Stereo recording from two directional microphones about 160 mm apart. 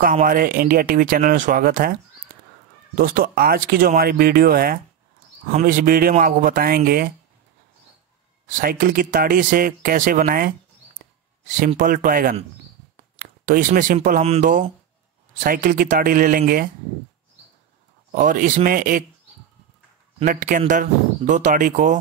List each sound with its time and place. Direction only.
0.0 s speech: 60° right (ahead or behind)
3.0 s speech: 65° right (ahead or behind)
8.5 s speech: 60° right (ahead or behind)
13.5 s speech: 55° right (ahead or behind)
18.1 s speech: 55° right (ahead or behind)
20.2 s speech: 55° right (ahead or behind)